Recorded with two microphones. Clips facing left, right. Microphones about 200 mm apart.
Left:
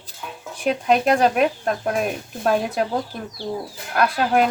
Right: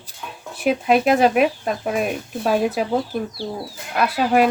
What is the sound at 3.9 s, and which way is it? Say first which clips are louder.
Speech: right 1 dB; 5° right (ahead or behind).